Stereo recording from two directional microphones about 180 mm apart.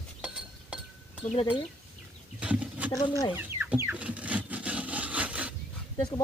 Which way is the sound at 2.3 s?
5° right (ahead or behind).